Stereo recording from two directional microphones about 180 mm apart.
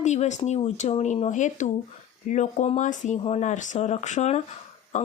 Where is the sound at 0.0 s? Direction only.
40° left (ahead or behind).